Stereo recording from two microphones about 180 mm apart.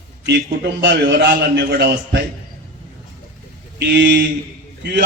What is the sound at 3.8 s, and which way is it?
Speech, 70° right (ahead or behind).